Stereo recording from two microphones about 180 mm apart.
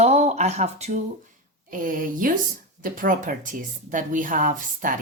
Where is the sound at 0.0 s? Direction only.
35° right (ahead or behind).